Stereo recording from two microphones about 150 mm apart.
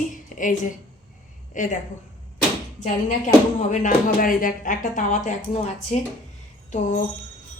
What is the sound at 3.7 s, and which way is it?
Speech, 60° left (ahead or behind).